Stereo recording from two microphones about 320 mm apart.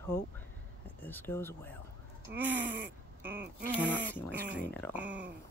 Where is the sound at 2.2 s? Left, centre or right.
Centre.